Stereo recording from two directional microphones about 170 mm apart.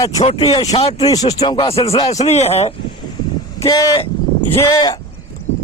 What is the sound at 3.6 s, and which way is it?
A man's voice, 25° left (ahead or behind).